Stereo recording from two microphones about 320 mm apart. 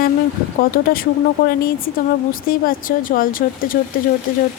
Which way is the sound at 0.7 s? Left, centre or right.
Left.